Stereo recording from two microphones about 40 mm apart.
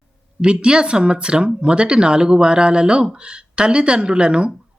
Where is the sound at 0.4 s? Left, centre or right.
Right.